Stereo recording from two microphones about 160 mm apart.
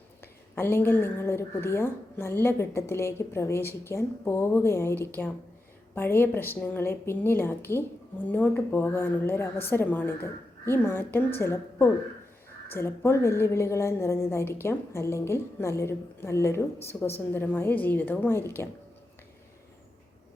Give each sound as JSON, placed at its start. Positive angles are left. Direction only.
{"t": 0.2, "sound": "speech", "side_deg": 15}